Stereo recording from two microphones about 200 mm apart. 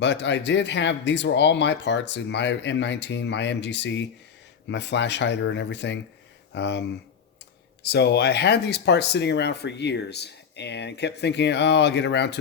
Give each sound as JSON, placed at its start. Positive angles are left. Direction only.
{"t": 0.0, "sound": "speech", "side_deg": 60}